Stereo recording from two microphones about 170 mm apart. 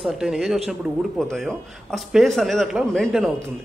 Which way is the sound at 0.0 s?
Centre (ahead or behind).